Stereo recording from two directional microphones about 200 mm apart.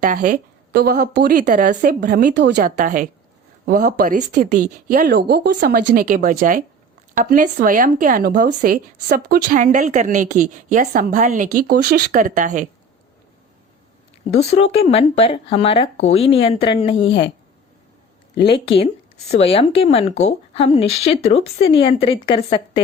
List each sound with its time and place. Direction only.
0.0 s speech: 40° right (ahead or behind)
2.3 s a woman's voice: 60° right (ahead or behind)
2.7 s a woman's voice: 40° right (ahead or behind)
14.3 s speech: 30° left (ahead or behind)
18.4 s speech: 25° left (ahead or behind)